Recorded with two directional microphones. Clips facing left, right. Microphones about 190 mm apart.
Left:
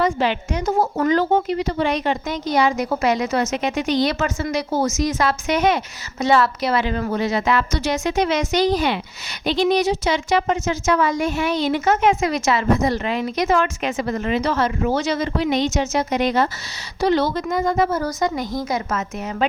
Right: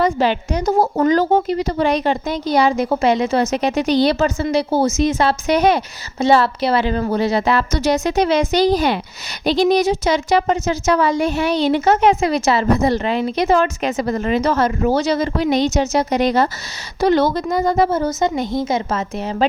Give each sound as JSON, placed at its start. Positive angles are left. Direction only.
{"t": 0.0, "sound": "a woman's voice", "side_deg": -35}
{"t": 17.0, "sound": "a woman's voice", "side_deg": -50}
{"t": 17.3, "sound": "a woman's voice", "side_deg": -35}